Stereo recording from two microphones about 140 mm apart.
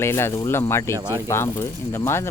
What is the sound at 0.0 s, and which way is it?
Speech, 20° left (ahead or behind).